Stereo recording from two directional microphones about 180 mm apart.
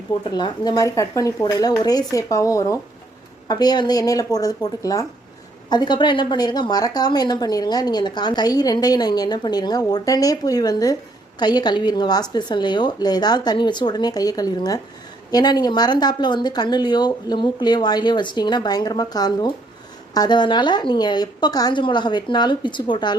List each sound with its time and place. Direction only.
0.3 s a woman's voice: 25° left (ahead or behind)